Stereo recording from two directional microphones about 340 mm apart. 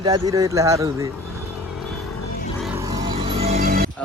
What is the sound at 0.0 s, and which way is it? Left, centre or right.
Speech, centre.